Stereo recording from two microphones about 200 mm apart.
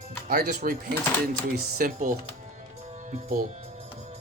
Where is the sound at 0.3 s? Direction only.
45° right (ahead or behind).